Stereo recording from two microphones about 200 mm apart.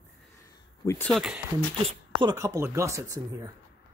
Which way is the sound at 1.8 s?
25° right (ahead or behind).